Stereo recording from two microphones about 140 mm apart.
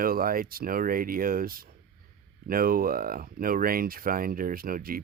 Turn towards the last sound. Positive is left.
turn(degrees=-90)